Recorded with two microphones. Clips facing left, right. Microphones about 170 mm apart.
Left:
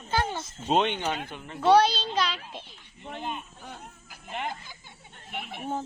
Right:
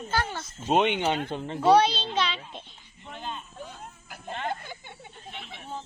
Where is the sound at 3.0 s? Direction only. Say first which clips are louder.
Left 3 dB; 20° left (ahead or behind).